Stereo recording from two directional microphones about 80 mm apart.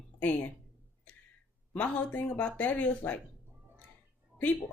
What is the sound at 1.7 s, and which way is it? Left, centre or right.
Speech, centre.